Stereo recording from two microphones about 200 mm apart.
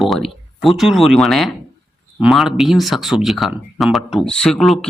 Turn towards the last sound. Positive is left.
turn(degrees=0)  # may be behind; listen again after turning